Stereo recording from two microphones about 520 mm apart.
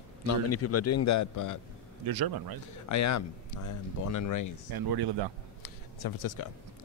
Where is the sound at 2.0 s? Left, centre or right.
Right.